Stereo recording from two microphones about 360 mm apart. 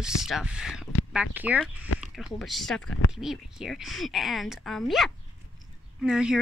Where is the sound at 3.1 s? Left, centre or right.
Centre.